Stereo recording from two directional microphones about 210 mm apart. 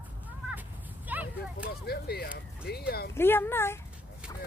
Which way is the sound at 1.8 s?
50° left (ahead or behind).